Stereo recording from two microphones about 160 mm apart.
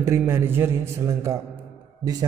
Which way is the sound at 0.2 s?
15° right (ahead or behind).